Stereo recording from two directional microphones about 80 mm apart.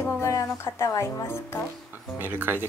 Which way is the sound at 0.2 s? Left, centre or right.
Left.